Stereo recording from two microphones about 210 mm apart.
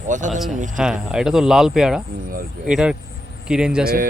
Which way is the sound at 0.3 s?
Centre (ahead or behind).